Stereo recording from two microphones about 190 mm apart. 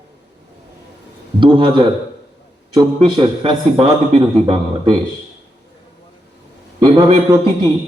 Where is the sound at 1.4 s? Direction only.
25° right (ahead or behind).